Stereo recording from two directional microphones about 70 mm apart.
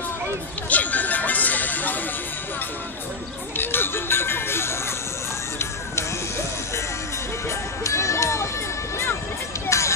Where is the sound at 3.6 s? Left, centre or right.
Left.